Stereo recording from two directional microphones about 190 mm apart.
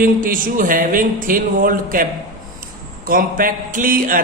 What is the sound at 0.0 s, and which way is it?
A man's voice, 45° right (ahead or behind).